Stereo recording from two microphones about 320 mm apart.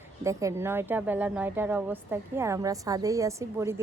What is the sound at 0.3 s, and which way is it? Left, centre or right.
A woman's voice, centre.